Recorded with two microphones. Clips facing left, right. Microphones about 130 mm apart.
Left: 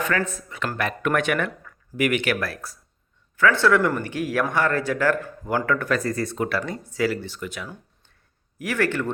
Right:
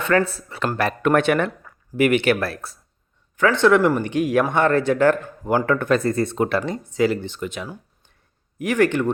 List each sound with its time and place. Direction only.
0.0 s speech: 35° right (ahead or behind); by 9.1 s 15° right (ahead or behind)